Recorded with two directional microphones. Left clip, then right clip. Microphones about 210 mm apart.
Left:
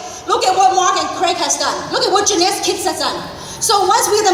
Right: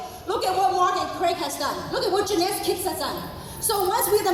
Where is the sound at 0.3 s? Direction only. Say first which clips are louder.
Left 10 dB; 25° left (ahead or behind).